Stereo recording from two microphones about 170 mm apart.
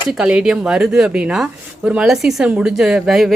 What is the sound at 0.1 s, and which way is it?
Speech, 5° right (ahead or behind).